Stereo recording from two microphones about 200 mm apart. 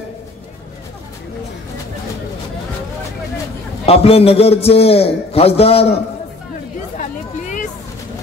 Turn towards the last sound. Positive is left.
turn(degrees=40)  # may be behind; listen again after turning